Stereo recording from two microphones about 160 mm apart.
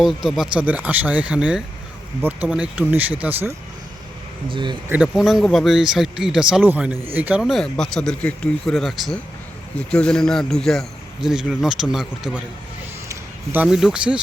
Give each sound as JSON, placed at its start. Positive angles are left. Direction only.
{"t": 0.0, "sound": "speech", "side_deg": 0}
{"t": 4.4, "sound": "speech", "side_deg": -30}
{"t": 4.9, "sound": "a man's voice", "side_deg": -5}